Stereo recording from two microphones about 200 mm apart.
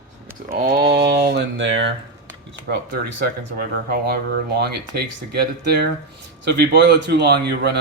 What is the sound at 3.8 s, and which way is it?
Speech, 50° right (ahead or behind).